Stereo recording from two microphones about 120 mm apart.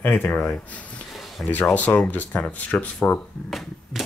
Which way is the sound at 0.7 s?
10° left (ahead or behind).